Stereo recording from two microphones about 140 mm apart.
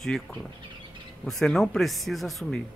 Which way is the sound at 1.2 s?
5° left (ahead or behind).